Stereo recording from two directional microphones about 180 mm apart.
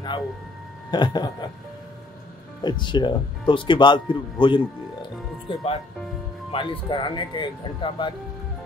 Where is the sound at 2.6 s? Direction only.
25° left (ahead or behind).